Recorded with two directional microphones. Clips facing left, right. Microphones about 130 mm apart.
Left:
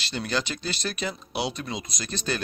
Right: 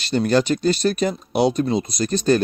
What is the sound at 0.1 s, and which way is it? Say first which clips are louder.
Speech: right 12 dB; 45° right (ahead or behind).